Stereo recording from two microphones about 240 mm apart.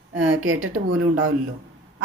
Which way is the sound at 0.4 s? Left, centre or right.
Right.